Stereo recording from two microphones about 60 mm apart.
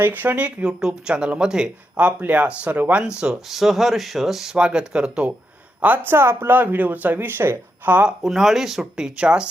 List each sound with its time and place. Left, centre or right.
0.0 s speech: right
3.5 s speech: centre
4.5 s speech: centre
5.8 s speech: right
7.9 s speech: right
8.2 s speech: centre